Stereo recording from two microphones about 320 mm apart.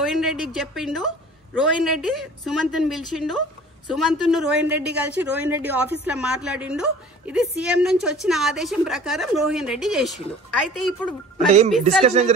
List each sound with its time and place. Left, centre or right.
0.0 s a woman's voice: centre
11.3 s a woman's voice: right